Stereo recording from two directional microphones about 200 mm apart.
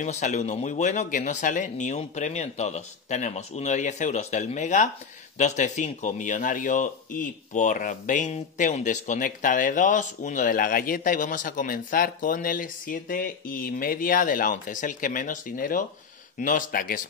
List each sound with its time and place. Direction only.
0.0 s speech: 35° left (ahead or behind)